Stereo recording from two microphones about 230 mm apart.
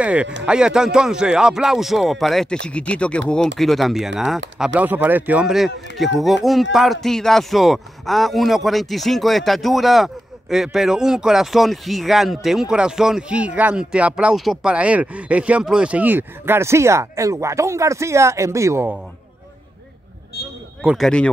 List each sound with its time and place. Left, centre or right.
0.0 s speech: centre
20.3 s a sound: left
20.8 s speech: centre